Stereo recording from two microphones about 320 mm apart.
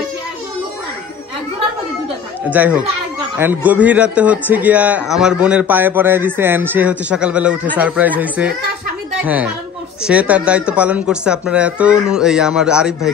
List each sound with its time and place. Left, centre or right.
2.5 s a man's voice: centre